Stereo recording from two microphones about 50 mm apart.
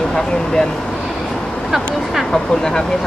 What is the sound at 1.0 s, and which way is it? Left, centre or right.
Vehicle, centre.